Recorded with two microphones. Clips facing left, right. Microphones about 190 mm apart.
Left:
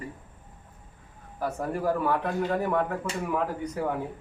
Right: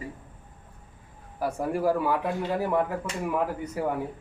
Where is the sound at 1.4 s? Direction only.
10° right (ahead or behind).